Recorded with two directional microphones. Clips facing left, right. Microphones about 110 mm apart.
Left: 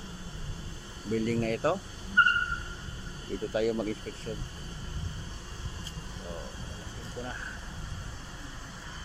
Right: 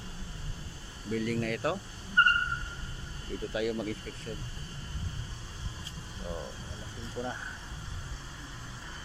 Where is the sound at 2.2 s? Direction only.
10° left (ahead or behind).